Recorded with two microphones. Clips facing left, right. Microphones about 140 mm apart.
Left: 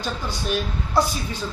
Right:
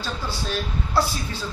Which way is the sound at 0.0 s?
20° left (ahead or behind).